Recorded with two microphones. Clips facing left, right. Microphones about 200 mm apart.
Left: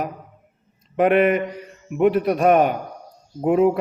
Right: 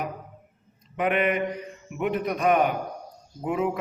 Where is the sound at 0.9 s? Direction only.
40° left (ahead or behind).